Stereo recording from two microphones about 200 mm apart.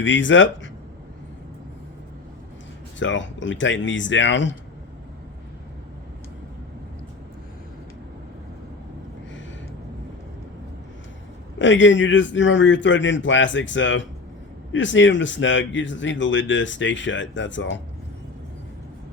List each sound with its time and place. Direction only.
0.0 s speech: 70° left (ahead or behind)
3.0 s speech: 65° left (ahead or behind)
11.6 s speech: 65° left (ahead or behind)